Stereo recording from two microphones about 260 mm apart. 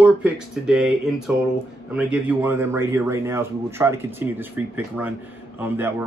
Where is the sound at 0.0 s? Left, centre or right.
Centre.